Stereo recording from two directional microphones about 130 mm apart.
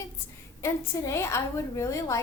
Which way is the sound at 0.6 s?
20° left (ahead or behind).